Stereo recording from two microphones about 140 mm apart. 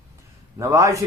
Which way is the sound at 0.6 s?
20° right (ahead or behind).